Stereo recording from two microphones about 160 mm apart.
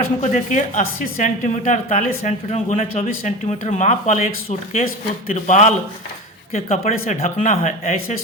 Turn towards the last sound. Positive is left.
turn(degrees=50)  # may be behind; listen again after turning